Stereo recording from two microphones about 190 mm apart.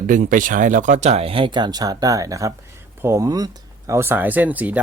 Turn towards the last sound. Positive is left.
turn(degrees=-10)  # may be behind; listen again after turning